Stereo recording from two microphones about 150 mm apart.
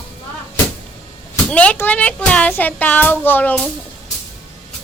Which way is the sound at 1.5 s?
10° left (ahead or behind).